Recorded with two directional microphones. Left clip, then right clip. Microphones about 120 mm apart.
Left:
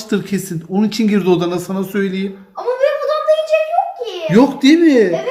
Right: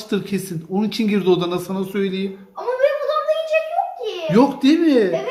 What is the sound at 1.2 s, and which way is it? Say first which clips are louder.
Speech: left 1 dB; 35° left (ahead or behind).